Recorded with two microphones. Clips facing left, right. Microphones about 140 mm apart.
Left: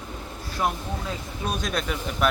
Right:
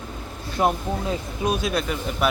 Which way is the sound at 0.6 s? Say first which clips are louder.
Right 5 dB; 25° right (ahead or behind).